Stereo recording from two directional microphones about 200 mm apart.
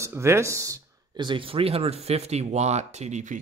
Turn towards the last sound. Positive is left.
turn(degrees=-35)  # may be behind; listen again after turning